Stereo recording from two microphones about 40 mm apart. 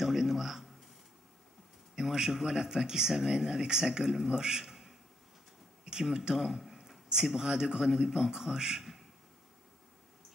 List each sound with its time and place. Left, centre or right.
0.0 s a man's voice: centre
2.0 s speech: centre
6.3 s a man's voice: centre